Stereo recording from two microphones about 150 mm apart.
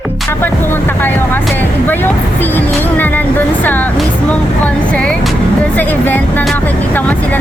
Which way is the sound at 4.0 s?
10° left (ahead or behind).